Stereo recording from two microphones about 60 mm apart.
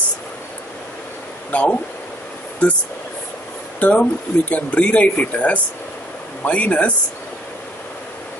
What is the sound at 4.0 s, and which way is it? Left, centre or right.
Speech, left.